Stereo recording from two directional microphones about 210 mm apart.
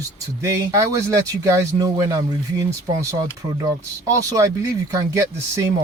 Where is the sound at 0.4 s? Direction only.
15° right (ahead or behind).